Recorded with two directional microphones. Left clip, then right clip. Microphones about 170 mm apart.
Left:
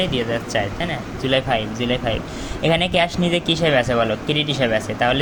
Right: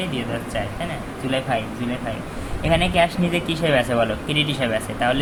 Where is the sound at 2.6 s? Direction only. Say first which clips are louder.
Left 1 dB; 35° left (ahead or behind).